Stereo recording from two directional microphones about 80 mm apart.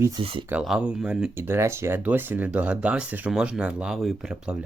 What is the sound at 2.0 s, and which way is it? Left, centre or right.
Speech, right.